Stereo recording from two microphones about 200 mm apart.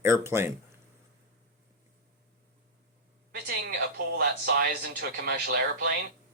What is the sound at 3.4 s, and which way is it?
A man's voice, 50° right (ahead or behind).